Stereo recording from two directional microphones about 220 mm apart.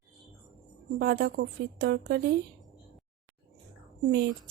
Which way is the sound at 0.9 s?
50° right (ahead or behind).